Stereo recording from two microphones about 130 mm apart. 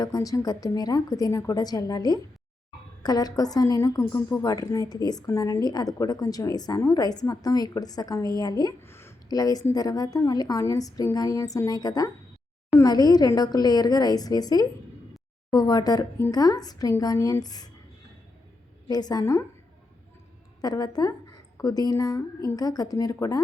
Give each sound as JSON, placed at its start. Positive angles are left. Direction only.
{"t": 0.0, "sound": "a woman's voice", "side_deg": 30}
{"t": 8.8, "sound": "a woman's voice", "side_deg": 20}
{"t": 18.9, "sound": "a woman's voice", "side_deg": 30}
{"t": 20.6, "sound": "a woman's voice", "side_deg": 30}